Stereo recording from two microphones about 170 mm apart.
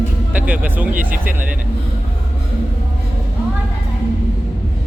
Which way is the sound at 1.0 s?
55° right (ahead or behind).